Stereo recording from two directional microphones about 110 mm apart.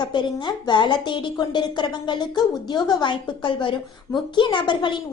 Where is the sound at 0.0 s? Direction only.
45° left (ahead or behind).